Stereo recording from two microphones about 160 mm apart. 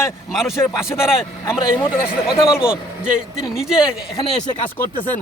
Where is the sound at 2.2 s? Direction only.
5° right (ahead or behind).